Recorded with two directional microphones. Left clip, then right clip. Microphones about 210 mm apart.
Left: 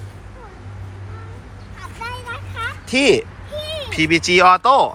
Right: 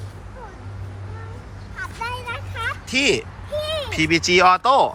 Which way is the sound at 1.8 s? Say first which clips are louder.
Right 2 dB; centre (ahead or behind).